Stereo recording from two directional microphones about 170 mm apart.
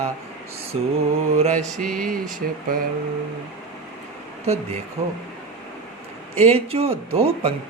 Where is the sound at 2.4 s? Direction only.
60° right (ahead or behind).